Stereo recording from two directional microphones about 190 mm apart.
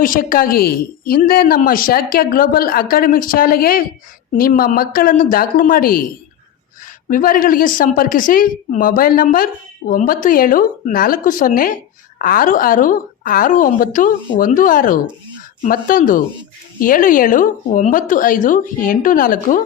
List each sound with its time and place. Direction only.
0.0 s a woman's voice: 45° left (ahead or behind)
7.1 s a woman's voice: 45° left (ahead or behind)